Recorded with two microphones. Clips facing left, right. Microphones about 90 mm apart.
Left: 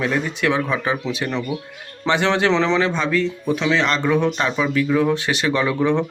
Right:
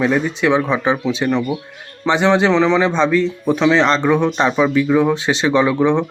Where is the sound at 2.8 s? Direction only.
25° right (ahead or behind).